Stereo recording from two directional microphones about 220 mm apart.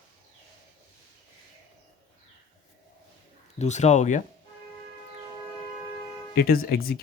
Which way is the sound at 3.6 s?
30° left (ahead or behind).